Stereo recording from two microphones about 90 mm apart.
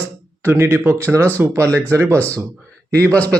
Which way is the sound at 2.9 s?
15° left (ahead or behind).